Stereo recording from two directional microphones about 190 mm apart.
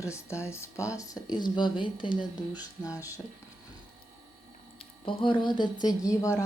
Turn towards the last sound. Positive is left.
turn(degrees=15)  # may be behind; listen again after turning